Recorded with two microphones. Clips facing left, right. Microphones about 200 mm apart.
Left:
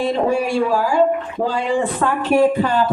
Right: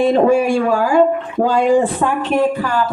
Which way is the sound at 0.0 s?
50° right (ahead or behind).